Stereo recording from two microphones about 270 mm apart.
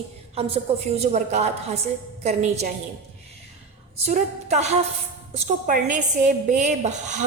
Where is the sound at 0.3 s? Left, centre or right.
Right.